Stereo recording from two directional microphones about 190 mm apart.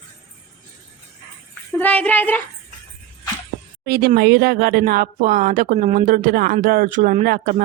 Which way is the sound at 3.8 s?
55° right (ahead or behind).